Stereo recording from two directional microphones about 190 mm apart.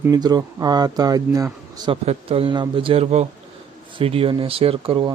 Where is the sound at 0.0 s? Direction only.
20° right (ahead or behind).